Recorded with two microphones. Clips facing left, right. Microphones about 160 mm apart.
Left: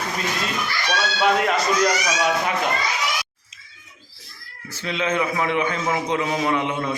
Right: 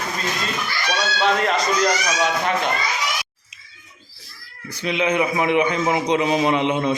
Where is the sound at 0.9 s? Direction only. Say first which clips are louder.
Even; 5° left (ahead or behind).